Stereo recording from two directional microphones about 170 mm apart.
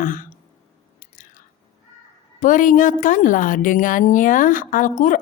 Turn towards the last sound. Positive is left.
turn(degrees=50)  # may be behind; listen again after turning